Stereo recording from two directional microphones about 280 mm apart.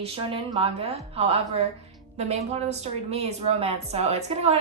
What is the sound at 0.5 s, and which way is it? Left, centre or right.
A woman's voice, right.